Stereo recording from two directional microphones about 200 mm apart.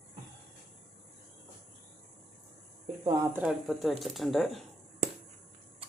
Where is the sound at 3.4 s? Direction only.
Centre (ahead or behind).